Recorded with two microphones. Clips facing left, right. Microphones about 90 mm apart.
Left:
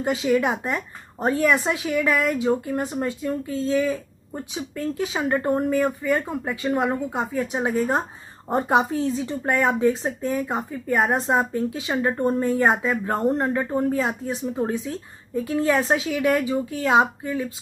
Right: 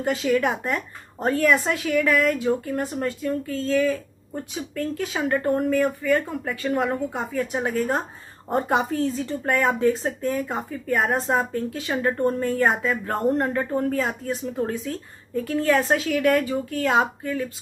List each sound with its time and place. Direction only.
0.0 s speech: 5° left (ahead or behind)
12.1 s speech: 15° left (ahead or behind)
12.4 s speech: 5° left (ahead or behind)
15.4 s speech: centre (ahead or behind)